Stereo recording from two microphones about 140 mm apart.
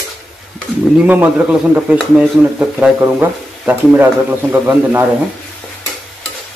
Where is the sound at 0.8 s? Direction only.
5° right (ahead or behind).